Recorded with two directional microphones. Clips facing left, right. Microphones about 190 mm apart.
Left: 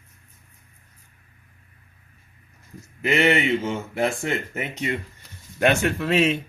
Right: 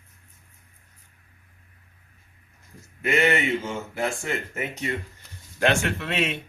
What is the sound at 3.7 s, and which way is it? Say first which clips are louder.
Speech: left 4 dB; 15° left (ahead or behind).